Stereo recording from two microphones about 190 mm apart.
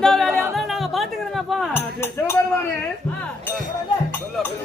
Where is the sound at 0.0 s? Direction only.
5° left (ahead or behind).